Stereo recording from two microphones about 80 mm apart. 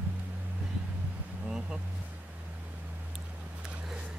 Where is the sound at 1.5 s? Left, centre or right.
Centre.